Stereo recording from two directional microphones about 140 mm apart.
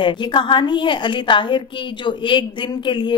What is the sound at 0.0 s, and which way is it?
A woman's voice, 35° left (ahead or behind).